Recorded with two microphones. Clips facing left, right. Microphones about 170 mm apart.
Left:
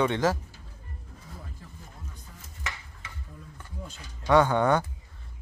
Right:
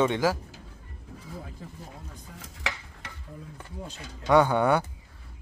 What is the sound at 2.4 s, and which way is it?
Stir, 70° right (ahead or behind).